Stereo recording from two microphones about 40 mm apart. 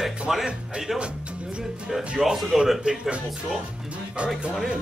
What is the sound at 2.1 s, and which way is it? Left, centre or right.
Speech, centre.